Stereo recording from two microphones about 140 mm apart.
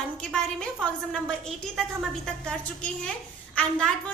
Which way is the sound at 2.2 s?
5° left (ahead or behind).